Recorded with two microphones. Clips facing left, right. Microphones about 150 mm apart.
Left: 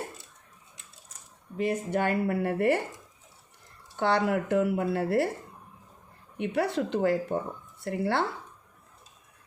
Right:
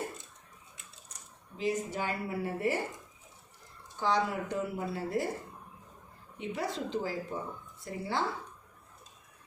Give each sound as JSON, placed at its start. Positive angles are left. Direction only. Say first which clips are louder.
{"t": 1.5, "sound": "a woman's voice", "louder": "left 5 dB", "side_deg": 60}
{"t": 3.9, "sound": "speech", "louder": "left 5 dB", "side_deg": 65}
{"t": 6.3, "sound": "speech", "louder": "left 8 dB", "side_deg": 70}